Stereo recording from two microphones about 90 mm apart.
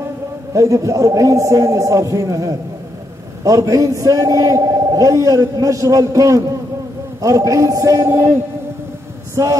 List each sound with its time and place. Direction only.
0.5 s a man's voice: 40° right (ahead or behind)
9.3 s speech: 35° right (ahead or behind)